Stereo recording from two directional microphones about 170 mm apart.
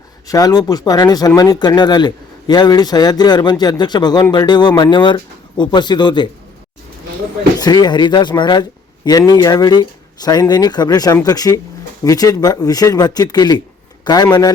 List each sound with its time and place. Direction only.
0.3 s a man's voice: 20° left (ahead or behind)
7.6 s a man's voice: 25° left (ahead or behind)